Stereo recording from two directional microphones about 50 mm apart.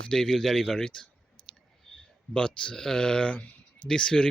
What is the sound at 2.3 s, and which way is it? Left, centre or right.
Speech, centre.